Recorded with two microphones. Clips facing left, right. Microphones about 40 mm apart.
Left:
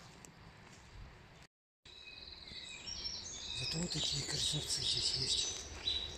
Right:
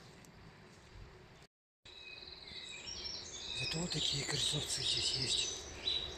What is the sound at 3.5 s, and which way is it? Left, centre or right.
Speech, right.